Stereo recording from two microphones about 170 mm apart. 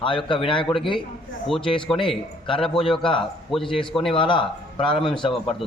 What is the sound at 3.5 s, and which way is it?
Speech, centre (ahead or behind).